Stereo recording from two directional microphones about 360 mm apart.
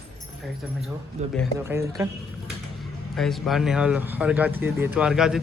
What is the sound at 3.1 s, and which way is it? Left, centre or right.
Speech, centre.